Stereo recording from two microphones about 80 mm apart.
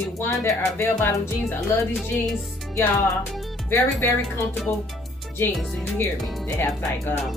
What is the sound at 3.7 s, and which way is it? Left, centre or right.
Speech, left.